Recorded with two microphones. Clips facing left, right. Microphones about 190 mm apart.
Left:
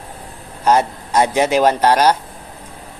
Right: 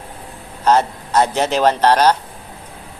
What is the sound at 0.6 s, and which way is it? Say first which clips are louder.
A man's voice: even; 10° left (ahead or behind).